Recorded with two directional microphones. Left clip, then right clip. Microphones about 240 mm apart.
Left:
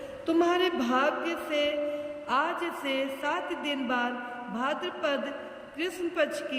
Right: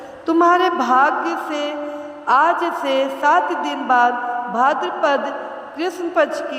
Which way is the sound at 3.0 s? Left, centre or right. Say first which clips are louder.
Right 19 dB; right.